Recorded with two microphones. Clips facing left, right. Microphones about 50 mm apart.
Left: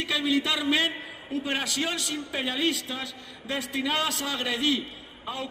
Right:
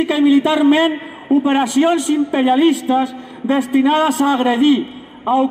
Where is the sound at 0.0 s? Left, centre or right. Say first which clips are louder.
Right 13 dB; right.